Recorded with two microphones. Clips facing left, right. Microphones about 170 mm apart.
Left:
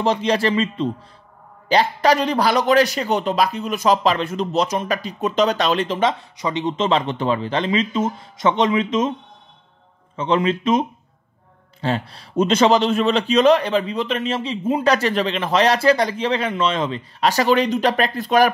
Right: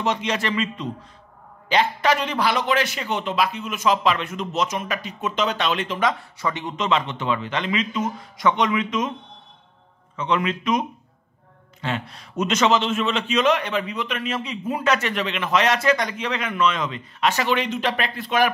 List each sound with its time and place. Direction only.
0.0 s a man's voice: 30° left (ahead or behind)
6.3 s speech: 20° left (ahead or behind)
6.9 s speech: 35° left (ahead or behind)
10.1 s a man's voice: 30° left (ahead or behind)